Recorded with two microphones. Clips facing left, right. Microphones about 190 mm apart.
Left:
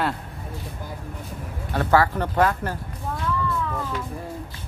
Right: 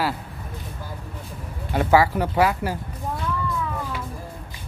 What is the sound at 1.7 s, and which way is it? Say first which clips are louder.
Speech: right 2 dB; 10° right (ahead or behind).